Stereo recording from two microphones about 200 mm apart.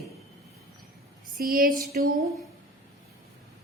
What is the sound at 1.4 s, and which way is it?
Speech, 45° right (ahead or behind).